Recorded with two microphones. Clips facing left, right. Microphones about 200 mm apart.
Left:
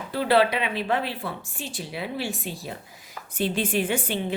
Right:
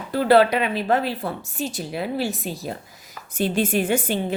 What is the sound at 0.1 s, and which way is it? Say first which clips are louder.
A woman's voice: right 5 dB; 45° right (ahead or behind).